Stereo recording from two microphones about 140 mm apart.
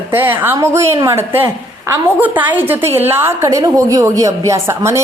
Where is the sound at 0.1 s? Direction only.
15° right (ahead or behind).